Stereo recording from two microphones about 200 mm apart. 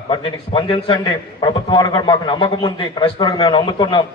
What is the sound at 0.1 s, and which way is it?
A man's voice, 25° left (ahead or behind).